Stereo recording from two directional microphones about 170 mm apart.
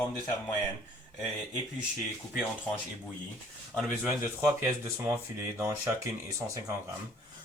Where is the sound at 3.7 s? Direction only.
Centre (ahead or behind).